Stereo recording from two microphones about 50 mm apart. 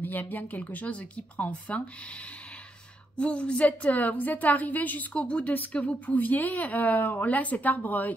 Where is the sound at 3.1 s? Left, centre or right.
Left.